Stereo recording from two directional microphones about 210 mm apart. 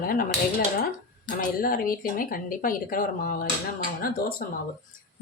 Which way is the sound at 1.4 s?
40° left (ahead or behind).